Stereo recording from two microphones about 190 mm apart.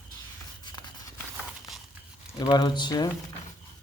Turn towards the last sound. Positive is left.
turn(degrees=20)  # may be behind; listen again after turning